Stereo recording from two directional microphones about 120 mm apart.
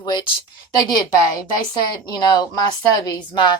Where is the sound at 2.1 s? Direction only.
35° left (ahead or behind).